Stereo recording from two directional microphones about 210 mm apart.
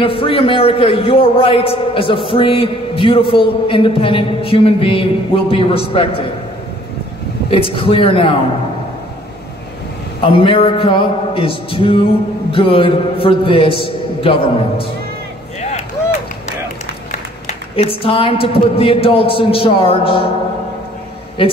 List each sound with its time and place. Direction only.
0.0 s a man's voice: 25° left (ahead or behind)
7.5 s a man's voice: 25° left (ahead or behind)
10.2 s a man's voice: 25° left (ahead or behind)
17.5 s a man's voice: 30° left (ahead or behind)